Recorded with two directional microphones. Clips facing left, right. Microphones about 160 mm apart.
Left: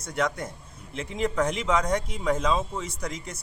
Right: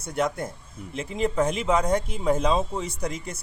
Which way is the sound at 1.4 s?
10° right (ahead or behind).